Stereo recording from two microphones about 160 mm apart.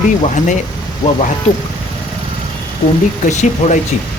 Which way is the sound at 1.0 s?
30° left (ahead or behind).